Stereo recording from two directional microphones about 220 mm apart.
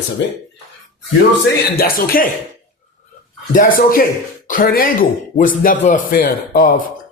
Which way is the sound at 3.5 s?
40° left (ahead or behind).